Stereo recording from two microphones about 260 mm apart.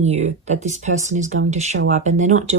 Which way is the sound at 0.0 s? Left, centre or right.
Right.